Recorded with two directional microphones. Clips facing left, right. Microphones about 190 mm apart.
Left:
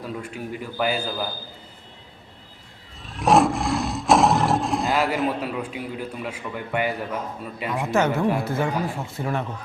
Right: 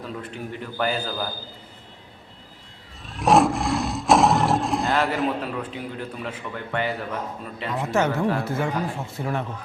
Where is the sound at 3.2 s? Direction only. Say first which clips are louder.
Even; centre (ahead or behind).